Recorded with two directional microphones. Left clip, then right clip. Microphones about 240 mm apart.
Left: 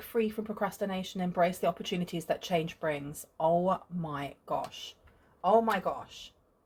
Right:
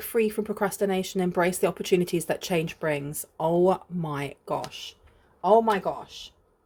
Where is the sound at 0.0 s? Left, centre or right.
Right.